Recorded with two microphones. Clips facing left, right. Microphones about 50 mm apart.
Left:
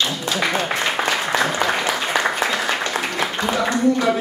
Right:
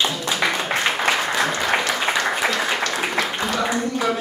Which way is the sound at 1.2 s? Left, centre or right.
Centre.